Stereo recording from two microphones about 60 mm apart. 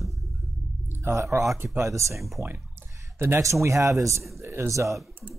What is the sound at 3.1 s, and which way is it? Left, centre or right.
Speech, right.